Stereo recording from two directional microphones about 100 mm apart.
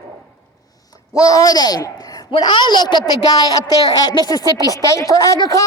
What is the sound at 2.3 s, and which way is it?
A woman's voice, 50° left (ahead or behind).